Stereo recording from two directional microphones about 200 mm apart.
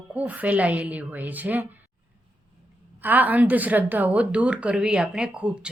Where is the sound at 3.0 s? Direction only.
10° right (ahead or behind).